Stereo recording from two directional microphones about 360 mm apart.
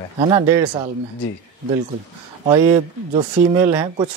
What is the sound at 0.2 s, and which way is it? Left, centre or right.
Speech, centre.